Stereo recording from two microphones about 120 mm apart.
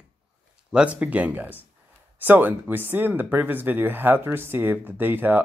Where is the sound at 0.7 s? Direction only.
10° right (ahead or behind).